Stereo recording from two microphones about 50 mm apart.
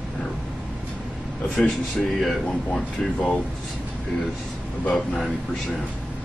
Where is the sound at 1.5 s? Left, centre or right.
Centre.